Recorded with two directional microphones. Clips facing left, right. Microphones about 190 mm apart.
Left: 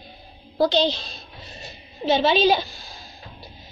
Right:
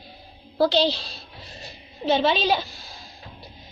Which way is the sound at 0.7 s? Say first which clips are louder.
Even; 5° right (ahead or behind).